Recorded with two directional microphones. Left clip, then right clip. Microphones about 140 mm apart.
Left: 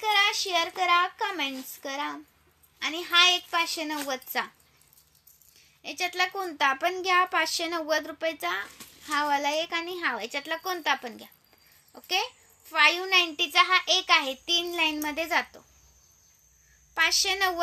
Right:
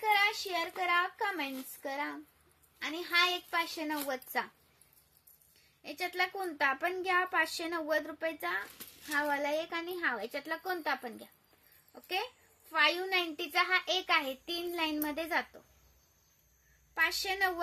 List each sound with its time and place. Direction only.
0.0 s a child's voice: 20° right (ahead or behind)
5.8 s a child's voice: 25° right (ahead or behind)
16.9 s a child's voice: 25° right (ahead or behind)